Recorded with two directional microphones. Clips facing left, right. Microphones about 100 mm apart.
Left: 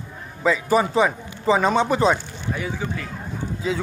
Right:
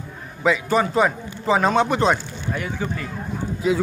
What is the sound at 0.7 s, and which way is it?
Speech, 5° left (ahead or behind).